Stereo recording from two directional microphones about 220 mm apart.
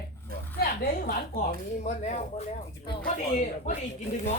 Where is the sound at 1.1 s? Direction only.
35° left (ahead or behind).